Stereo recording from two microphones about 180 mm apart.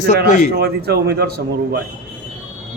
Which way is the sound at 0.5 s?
60° right (ahead or behind).